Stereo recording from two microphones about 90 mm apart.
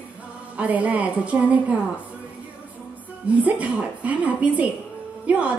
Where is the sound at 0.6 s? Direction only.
15° right (ahead or behind).